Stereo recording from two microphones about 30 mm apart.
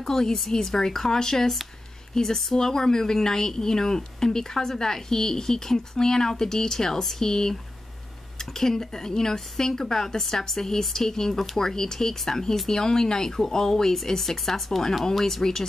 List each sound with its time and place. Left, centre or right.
0.0 s a woman's voice: centre